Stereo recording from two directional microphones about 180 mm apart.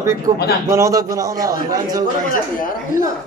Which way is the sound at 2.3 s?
50° left (ahead or behind).